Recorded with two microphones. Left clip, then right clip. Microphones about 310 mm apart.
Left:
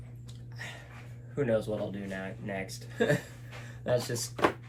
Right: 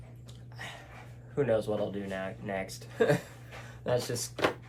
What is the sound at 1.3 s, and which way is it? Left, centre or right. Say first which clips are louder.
Speech: right 1 dB; centre.